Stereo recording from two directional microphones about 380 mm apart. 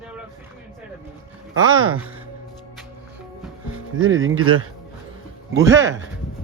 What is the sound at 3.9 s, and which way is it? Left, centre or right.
Speech, right.